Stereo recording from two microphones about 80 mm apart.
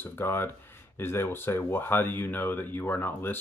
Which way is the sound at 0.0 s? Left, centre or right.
Left.